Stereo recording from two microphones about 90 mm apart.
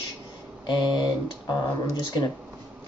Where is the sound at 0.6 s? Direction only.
55° left (ahead or behind).